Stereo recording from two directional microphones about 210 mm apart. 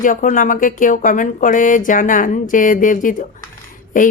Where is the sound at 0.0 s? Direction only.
40° left (ahead or behind).